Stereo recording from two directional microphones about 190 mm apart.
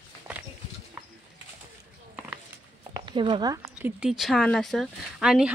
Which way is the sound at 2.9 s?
25° right (ahead or behind).